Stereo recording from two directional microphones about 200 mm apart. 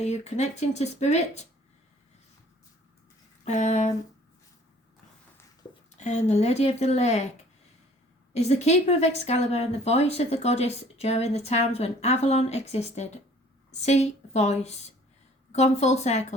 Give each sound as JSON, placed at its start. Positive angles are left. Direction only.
{"t": 0.0, "sound": "speech", "side_deg": 35}
{"t": 3.4, "sound": "speech", "side_deg": 35}
{"t": 6.0, "sound": "speech", "side_deg": 35}
{"t": 8.3, "sound": "a woman's voice", "side_deg": 35}